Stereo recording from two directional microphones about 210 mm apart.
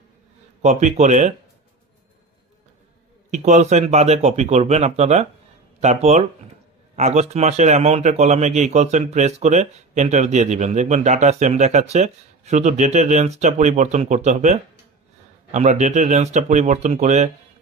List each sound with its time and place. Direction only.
0.6 s a man's voice: 35° right (ahead or behind)
3.3 s a man's voice: 35° right (ahead or behind)